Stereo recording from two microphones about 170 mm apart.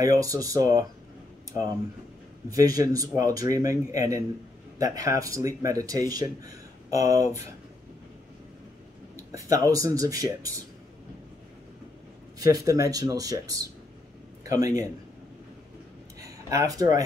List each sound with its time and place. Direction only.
0.0 s speech: 20° right (ahead or behind)
2.5 s speech: 20° right (ahead or behind)
9.1 s speech: 20° right (ahead or behind)
12.4 s speech: 20° right (ahead or behind)
16.2 s a sound: 20° right (ahead or behind)